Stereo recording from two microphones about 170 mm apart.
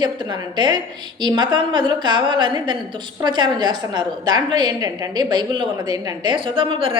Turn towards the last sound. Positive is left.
turn(degrees=-30)  # may be behind; listen again after turning